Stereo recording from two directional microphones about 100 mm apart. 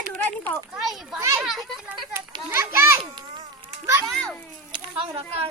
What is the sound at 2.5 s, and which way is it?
Speech, 25° right (ahead or behind).